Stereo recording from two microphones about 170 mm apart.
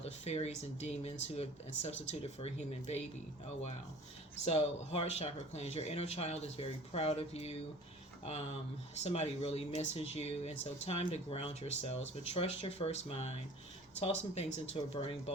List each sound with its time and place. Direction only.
0.0 s speech: 40° left (ahead or behind)
4.4 s speech: 35° left (ahead or behind)
9.0 s speech: 40° left (ahead or behind)